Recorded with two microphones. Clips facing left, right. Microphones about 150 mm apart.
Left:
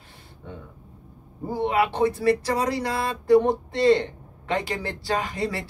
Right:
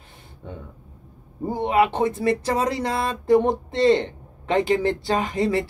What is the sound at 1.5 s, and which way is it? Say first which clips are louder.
Speech: right 3 dB; 20° right (ahead or behind).